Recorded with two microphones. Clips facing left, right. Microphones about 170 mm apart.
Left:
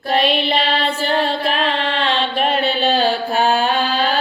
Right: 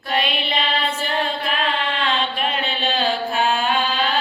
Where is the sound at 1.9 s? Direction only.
35° left (ahead or behind).